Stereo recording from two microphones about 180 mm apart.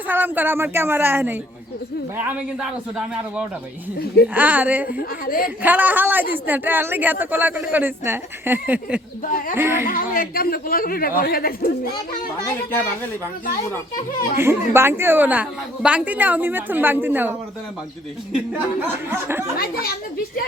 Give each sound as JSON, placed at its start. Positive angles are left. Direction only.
{"t": 0.1, "sound": "a woman's voice", "side_deg": -10}
{"t": 4.4, "sound": "a woman's voice", "side_deg": -10}
{"t": 4.9, "sound": "a man's voice", "side_deg": 50}
{"t": 5.6, "sound": "a woman's voice", "side_deg": -10}
{"t": 9.2, "sound": "a man's voice", "side_deg": 50}
{"t": 9.6, "sound": "a woman's voice", "side_deg": -15}
{"t": 9.8, "sound": "a man's voice", "side_deg": 50}
{"t": 14.3, "sound": "a woman's voice", "side_deg": -15}
{"t": 19.5, "sound": "a woman's voice", "side_deg": 55}